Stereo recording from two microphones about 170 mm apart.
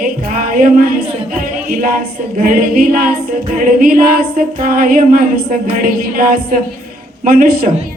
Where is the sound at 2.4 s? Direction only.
55° right (ahead or behind).